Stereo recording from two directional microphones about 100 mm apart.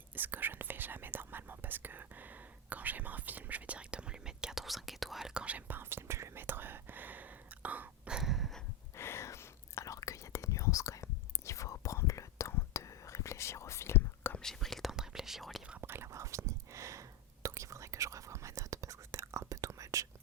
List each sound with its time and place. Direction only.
0.2 s whispering: 20° right (ahead or behind); by 8.6 s centre (ahead or behind)
9.0 s whispering: 25° left (ahead or behind)
14.3 s whispering: 5° left (ahead or behind)
15.8 s whispering: 25° right (ahead or behind)